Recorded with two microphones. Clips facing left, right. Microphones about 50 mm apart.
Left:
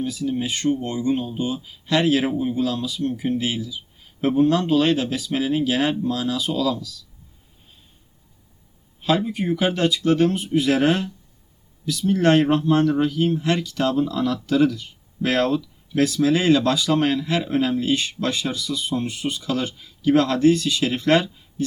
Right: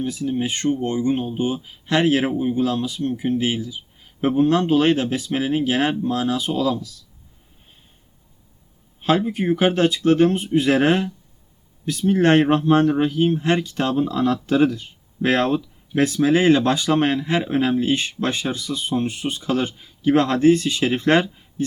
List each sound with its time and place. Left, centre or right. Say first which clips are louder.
0.0 s speech: right 1 dB; right
9.2 s speech: right 3 dB; right